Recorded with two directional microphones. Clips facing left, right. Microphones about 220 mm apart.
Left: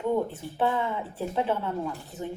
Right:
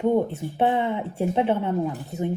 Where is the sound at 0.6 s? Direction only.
20° right (ahead or behind).